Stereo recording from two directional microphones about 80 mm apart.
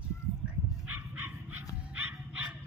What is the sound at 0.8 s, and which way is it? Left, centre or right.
Bow-wow, right.